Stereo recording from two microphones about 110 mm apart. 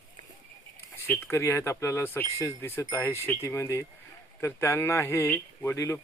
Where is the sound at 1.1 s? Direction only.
25° left (ahead or behind).